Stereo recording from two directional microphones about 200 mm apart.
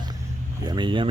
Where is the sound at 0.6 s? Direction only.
25° right (ahead or behind).